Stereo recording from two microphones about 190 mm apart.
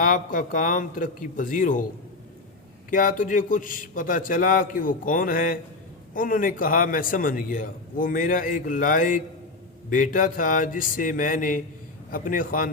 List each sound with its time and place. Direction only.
0.0 s a man's voice: 45° left (ahead or behind)
2.9 s a man's voice: 45° left (ahead or behind)